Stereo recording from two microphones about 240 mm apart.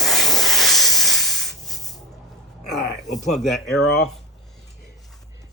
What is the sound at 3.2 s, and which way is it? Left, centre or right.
Speech, centre.